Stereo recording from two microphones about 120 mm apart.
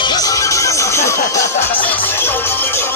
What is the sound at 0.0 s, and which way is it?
Music, 35° left (ahead or behind).